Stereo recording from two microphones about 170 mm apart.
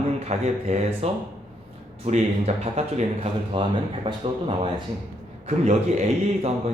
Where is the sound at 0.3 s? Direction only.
40° right (ahead or behind).